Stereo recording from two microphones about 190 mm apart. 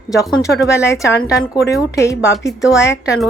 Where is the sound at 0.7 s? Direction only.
15° left (ahead or behind).